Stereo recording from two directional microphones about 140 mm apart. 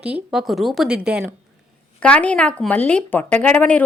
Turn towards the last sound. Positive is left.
turn(degrees=10)  # may be behind; listen again after turning